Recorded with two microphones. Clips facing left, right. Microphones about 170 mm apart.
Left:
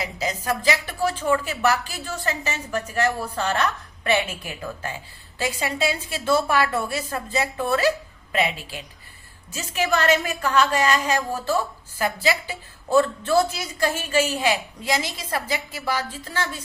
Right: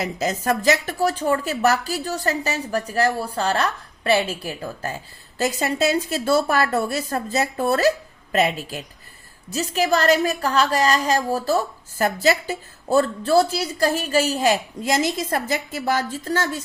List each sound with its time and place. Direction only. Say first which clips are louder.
0.0 s a woman's voice: right 4 dB; 45° right (ahead or behind)